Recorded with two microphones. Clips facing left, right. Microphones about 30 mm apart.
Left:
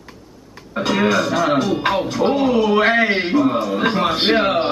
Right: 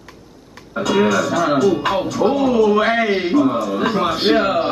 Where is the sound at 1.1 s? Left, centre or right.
Left.